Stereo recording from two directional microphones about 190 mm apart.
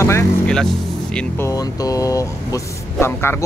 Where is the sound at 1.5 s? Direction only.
20° left (ahead or behind).